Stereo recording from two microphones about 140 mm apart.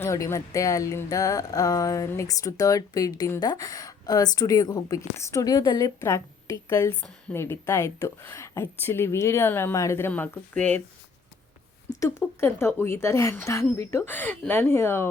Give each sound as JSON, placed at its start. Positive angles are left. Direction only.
{"t": 0.0, "sound": "a woman's voice", "side_deg": 20}
{"t": 11.9, "sound": "a woman's voice", "side_deg": 20}